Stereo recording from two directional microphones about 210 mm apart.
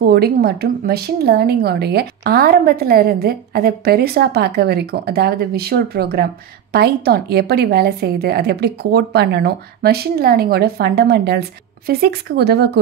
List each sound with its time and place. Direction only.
0.0 s a woman's voice: 50° right (ahead or behind)